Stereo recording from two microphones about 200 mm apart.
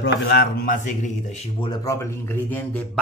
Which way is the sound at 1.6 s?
20° left (ahead or behind).